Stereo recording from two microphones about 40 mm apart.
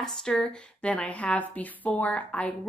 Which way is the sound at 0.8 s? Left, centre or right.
Left.